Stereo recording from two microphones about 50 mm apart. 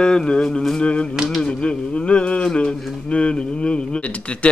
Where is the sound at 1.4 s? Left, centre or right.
Left.